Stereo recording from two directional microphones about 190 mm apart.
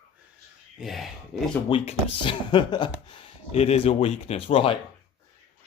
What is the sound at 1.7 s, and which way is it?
Speech, 25° left (ahead or behind).